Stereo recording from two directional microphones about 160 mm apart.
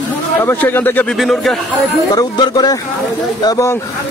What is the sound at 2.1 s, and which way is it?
Speech, 25° left (ahead or behind).